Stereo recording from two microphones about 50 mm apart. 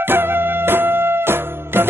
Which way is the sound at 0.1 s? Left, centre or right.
Right.